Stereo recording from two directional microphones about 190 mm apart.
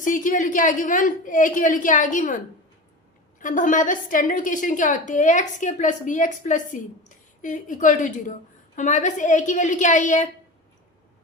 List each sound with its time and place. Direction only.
0.0 s a woman's voice: 45° left (ahead or behind)
3.4 s a woman's voice: 45° left (ahead or behind)